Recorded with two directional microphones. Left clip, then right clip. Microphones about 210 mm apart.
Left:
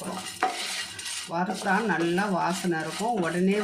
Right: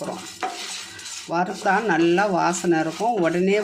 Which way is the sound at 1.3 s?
40° right (ahead or behind).